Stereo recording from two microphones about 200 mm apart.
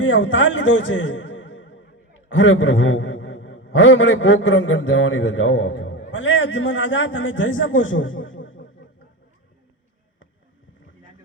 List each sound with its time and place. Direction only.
0.0 s a man's voice: 70° left (ahead or behind)